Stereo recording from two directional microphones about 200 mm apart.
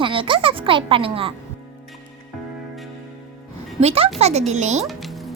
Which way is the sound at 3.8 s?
30° right (ahead or behind).